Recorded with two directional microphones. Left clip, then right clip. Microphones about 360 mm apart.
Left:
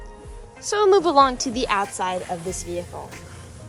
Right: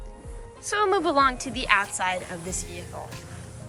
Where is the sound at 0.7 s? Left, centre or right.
Centre.